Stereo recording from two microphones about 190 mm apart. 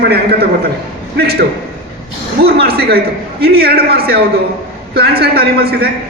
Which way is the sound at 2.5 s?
55° right (ahead or behind).